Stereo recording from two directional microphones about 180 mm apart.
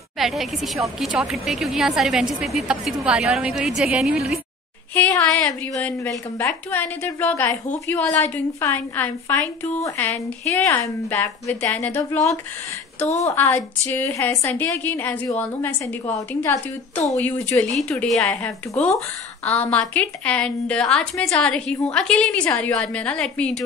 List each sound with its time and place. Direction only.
0.2 s a woman's voice: centre (ahead or behind)
13.2 s a woman's voice: 15° left (ahead or behind)
17.2 s a woman's voice: 10° left (ahead or behind)